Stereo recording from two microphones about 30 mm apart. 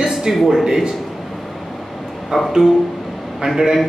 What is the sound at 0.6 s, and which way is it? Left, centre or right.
Speech, right.